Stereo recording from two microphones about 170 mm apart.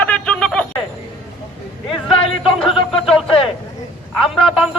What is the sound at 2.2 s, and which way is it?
Speech, 35° left (ahead or behind).